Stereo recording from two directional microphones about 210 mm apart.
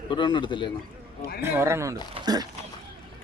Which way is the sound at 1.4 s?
10° right (ahead or behind).